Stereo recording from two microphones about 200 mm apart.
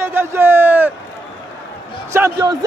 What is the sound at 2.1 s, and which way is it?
Speech, 15° right (ahead or behind).